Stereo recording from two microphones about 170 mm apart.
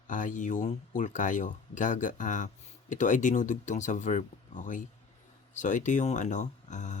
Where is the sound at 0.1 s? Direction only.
50° left (ahead or behind).